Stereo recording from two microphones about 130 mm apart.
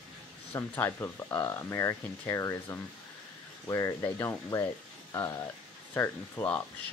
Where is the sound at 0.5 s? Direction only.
20° left (ahead or behind).